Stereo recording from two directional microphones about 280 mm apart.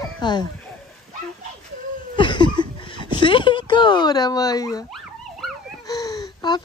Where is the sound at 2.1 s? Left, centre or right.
Centre.